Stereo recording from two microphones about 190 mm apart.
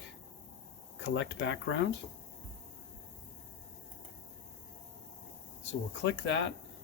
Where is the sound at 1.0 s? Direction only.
75° left (ahead or behind).